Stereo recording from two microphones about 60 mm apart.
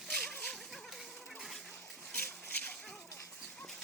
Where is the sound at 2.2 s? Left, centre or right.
Left.